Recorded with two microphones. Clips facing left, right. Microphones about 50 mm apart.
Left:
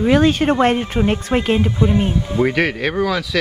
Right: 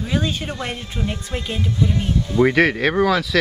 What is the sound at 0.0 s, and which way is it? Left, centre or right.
Speech, left.